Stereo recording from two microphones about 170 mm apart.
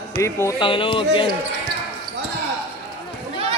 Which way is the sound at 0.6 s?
30° left (ahead or behind).